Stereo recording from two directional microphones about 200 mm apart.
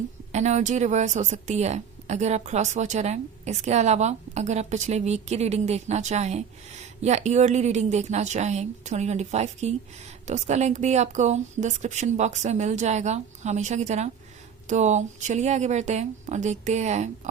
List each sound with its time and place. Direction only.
0.3 s speech: 35° right (ahead or behind)